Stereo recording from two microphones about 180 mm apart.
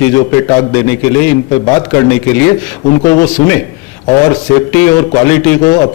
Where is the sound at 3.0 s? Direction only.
20° left (ahead or behind).